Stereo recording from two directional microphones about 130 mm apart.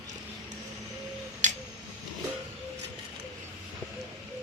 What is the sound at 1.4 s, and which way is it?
Tick-tock, 70° right (ahead or behind).